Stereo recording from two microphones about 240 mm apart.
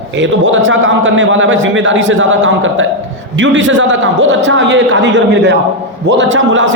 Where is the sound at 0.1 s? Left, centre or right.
Right.